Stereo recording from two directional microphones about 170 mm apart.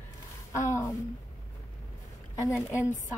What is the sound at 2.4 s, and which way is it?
Speech, 15° left (ahead or behind).